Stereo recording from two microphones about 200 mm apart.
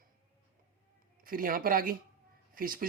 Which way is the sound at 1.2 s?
45° right (ahead or behind).